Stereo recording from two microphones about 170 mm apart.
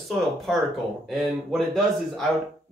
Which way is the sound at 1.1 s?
Centre (ahead or behind).